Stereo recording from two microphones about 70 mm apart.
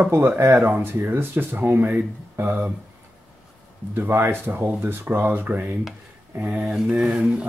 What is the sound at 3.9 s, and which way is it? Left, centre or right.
Speech, right.